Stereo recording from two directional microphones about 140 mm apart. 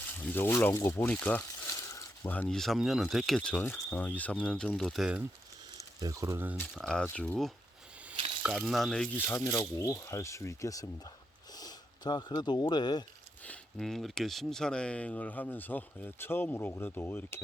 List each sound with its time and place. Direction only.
0.2 s speech: 15° left (ahead or behind); by 5.2 s 5° right (ahead or behind)
6.0 s speech: 25° right (ahead or behind)
6.7 s speech: centre (ahead or behind)
9.1 s speech: 15° left (ahead or behind)
13.4 s speech: 5° left (ahead or behind)